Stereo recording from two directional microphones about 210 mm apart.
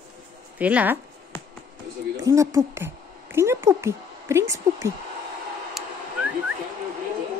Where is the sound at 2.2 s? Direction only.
15° right (ahead or behind).